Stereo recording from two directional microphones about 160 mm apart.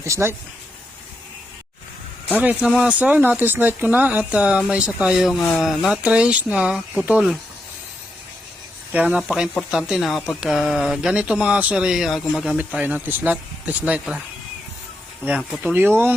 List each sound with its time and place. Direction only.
0.0 s speech: 15° right (ahead or behind)
2.4 s speech: 10° right (ahead or behind)
8.9 s speech: 10° right (ahead or behind)
15.2 s speech: 10° right (ahead or behind)